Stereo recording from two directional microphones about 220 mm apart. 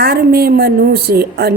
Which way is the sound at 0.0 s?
45° right (ahead or behind).